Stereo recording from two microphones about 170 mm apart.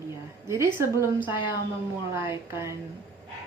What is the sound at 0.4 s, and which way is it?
Speech, 15° right (ahead or behind).